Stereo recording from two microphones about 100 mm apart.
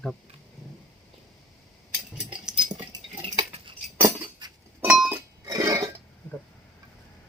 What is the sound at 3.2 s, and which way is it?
Cutlery, 55° right (ahead or behind).